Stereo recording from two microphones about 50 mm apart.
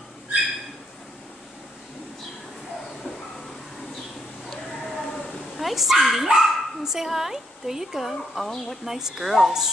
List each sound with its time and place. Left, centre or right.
4.8 s speech: centre